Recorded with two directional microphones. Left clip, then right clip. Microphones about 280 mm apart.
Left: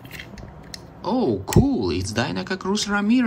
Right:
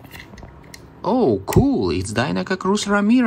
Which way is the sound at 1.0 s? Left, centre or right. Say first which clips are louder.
Right 5 dB; centre.